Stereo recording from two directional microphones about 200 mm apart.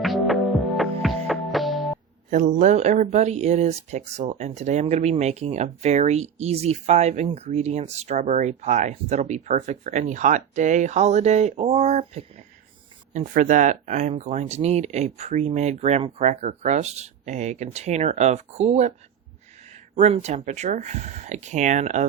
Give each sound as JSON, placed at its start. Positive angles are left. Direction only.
{"t": 0.0, "sound": "music", "side_deg": 0}
{"t": 2.3, "sound": "speech", "side_deg": -40}